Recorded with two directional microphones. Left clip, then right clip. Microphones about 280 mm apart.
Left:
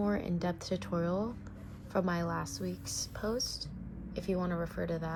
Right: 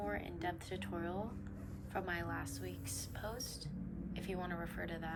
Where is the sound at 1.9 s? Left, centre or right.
Centre.